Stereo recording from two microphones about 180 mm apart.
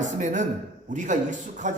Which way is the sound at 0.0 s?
45° right (ahead or behind).